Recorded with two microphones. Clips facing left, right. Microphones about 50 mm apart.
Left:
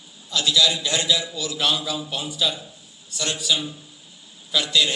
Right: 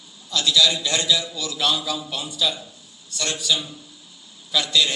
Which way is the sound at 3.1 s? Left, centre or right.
Right.